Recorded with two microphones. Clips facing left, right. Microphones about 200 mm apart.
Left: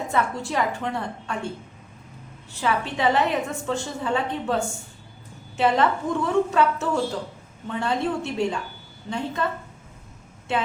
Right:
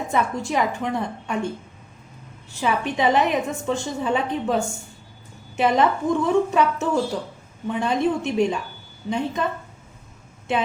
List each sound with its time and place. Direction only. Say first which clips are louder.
0.1 s a woman's voice: right 3 dB; 15° right (ahead or behind)
2.6 s a woman's voice: right 2 dB; 15° right (ahead or behind)
10.5 s a woman's voice: right 2 dB; 15° right (ahead or behind)